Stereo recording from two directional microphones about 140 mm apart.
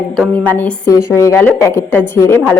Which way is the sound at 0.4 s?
10° left (ahead or behind).